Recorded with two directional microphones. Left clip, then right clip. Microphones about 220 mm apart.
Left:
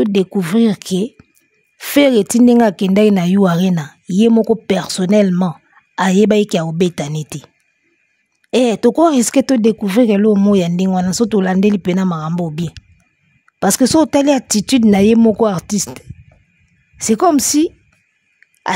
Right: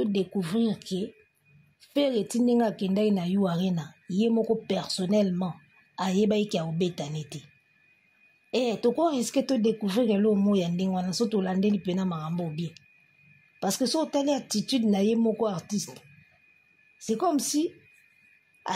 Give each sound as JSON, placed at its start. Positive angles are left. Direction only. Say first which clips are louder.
{"t": 0.0, "sound": "speech", "louder": "left 13 dB", "side_deg": 55}
{"t": 17.0, "sound": "speech", "louder": "left 14 dB", "side_deg": 50}